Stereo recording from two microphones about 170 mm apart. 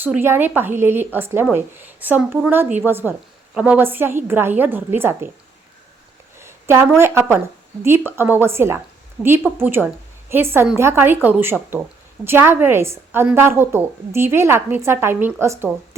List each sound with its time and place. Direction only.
0.0 s a woman's voice: 10° right (ahead or behind)
6.4 s a sound: 15° right (ahead or behind)
6.8 s a woman's voice: 15° right (ahead or behind)